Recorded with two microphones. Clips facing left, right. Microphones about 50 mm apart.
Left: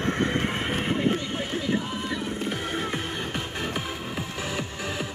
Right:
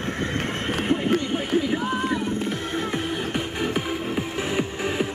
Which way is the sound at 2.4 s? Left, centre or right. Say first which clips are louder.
Right 2 dB; centre.